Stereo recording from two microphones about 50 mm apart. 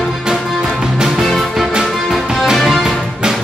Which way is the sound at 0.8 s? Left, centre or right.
Centre.